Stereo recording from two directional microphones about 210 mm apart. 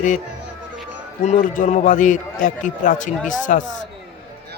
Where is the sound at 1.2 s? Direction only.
40° left (ahead or behind).